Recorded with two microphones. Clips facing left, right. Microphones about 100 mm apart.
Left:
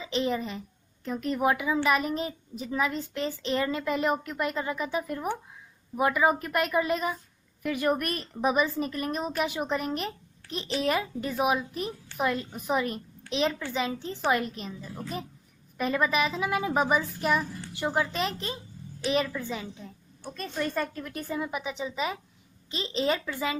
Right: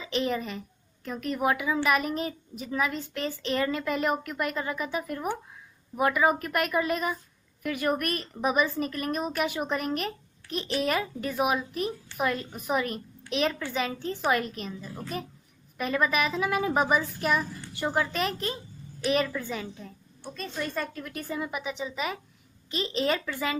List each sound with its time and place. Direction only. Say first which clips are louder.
0.0 s a woman's voice: even; 25° left (ahead or behind)
20.9 s a woman's voice: left 1 dB; 30° left (ahead or behind)